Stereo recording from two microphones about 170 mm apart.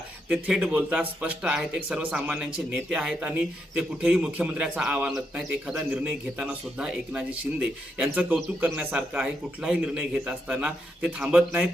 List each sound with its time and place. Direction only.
0.3 s a man's voice: 5° right (ahead or behind)